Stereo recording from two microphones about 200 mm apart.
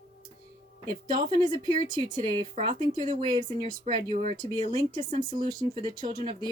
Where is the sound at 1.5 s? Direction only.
20° right (ahead or behind).